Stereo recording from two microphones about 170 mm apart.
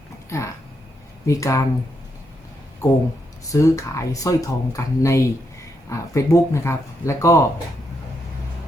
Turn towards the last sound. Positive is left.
turn(degrees=15)  # may be behind; listen again after turning